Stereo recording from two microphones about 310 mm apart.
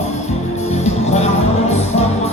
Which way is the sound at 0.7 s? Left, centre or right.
Left.